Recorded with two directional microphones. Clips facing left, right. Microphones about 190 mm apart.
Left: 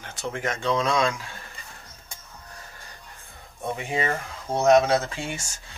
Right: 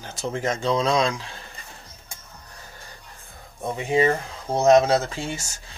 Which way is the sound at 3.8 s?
25° right (ahead or behind).